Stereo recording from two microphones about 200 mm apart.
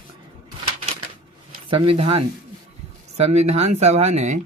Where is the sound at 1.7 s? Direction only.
25° right (ahead or behind).